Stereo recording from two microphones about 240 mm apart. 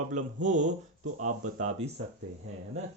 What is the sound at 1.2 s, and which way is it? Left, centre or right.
Speech, right.